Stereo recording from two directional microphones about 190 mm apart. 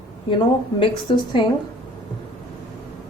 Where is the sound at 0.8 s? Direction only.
25° left (ahead or behind).